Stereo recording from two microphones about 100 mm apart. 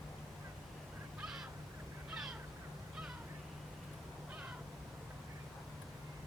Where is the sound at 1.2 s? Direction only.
5° right (ahead or behind).